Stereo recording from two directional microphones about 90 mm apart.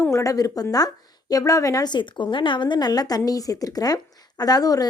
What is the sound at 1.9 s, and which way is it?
A woman's voice, 60° left (ahead or behind).